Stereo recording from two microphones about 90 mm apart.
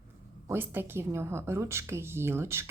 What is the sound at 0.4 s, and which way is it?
A woman's voice, 25° right (ahead or behind).